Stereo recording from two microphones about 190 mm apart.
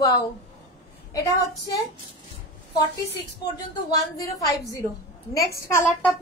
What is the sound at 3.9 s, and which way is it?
A woman's voice, 20° left (ahead or behind).